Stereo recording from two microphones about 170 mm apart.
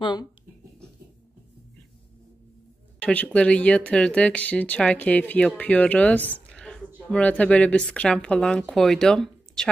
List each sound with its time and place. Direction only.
0.0 s speech: 25° left (ahead or behind)
3.0 s a sound: 10° left (ahead or behind)
3.3 s speech: 5° left (ahead or behind)